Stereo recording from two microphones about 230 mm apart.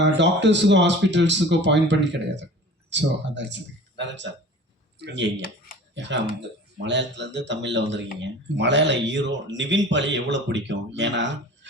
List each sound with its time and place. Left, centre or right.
0.0 s speech: right